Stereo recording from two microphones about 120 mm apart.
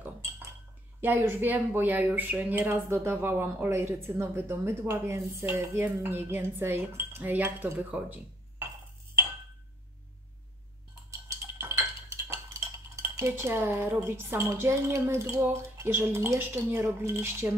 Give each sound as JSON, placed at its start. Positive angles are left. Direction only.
{"t": 1.0, "sound": "speech", "side_deg": -15}
{"t": 11.1, "sound": "a sound", "side_deg": -25}
{"t": 12.3, "sound": "chink", "side_deg": -25}
{"t": 13.1, "sound": "speech", "side_deg": -20}